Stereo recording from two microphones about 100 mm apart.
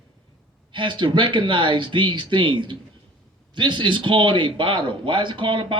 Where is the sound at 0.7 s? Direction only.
55° right (ahead or behind).